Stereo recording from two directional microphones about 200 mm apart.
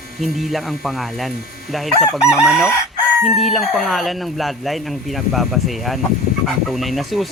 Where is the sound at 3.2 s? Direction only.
Centre (ahead or behind).